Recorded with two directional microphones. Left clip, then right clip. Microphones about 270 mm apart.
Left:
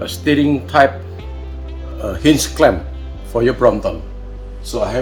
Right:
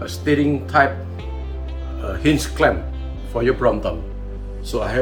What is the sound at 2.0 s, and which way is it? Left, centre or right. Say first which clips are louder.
Speech: left 5 dB; left.